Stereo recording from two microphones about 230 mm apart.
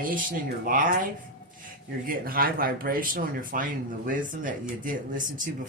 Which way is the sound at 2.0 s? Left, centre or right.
Right.